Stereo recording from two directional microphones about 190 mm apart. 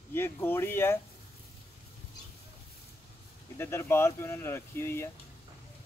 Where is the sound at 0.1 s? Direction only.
10° left (ahead or behind).